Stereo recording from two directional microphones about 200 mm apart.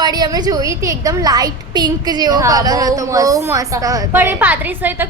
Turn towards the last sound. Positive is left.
turn(degrees=-10)  # may be behind; listen again after turning